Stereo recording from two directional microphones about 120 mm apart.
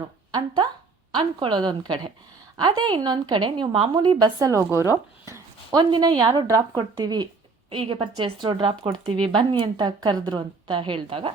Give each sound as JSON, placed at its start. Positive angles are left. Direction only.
{"t": 0.3, "sound": "a woman's voice", "side_deg": -40}
{"t": 5.7, "sound": "a woman's voice", "side_deg": -40}